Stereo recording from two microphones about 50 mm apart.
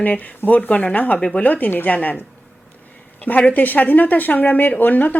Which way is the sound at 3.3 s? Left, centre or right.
Left.